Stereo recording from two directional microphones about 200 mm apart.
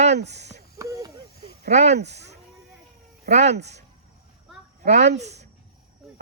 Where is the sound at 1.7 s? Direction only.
35° right (ahead or behind).